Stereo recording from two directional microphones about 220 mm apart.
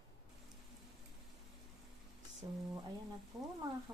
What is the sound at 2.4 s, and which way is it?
Speech, 25° right (ahead or behind).